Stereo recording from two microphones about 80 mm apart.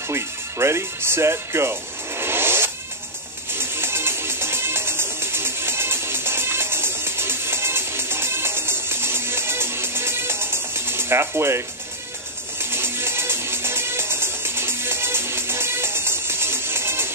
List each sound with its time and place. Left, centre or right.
0.1 s speech: right
3.5 s music: right